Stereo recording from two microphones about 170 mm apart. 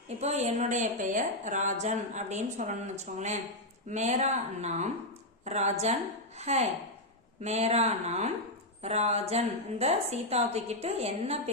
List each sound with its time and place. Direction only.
0.2 s a woman's voice: 40° right (ahead or behind)